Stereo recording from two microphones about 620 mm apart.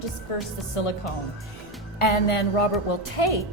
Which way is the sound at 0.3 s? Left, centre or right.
Left.